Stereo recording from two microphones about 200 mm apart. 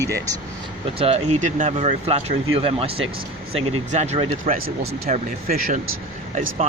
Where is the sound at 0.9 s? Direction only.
30° right (ahead or behind).